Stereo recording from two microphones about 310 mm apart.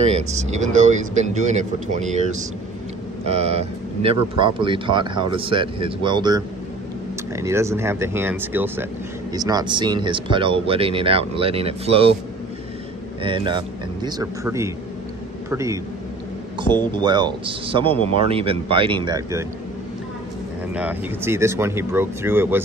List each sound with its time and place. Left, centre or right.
0.1 s speech: right
13.2 s speech: centre
16.9 s speech: centre
20.7 s speech: centre